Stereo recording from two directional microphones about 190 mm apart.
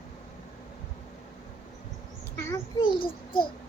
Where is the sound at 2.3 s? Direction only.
20° left (ahead or behind).